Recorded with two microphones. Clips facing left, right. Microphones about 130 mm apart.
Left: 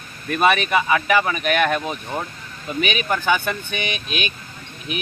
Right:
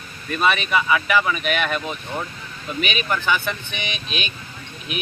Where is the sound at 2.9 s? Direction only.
45° left (ahead or behind).